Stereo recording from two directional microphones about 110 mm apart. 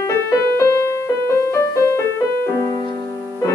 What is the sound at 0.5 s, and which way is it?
Music, 25° left (ahead or behind).